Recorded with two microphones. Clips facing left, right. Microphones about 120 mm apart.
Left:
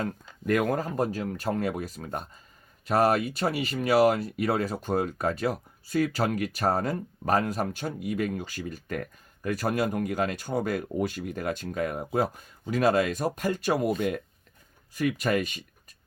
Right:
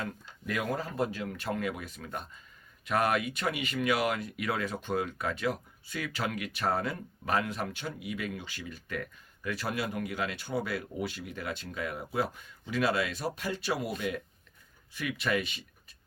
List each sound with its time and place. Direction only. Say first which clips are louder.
0.0 s speech: left 6 dB; 50° left (ahead or behind)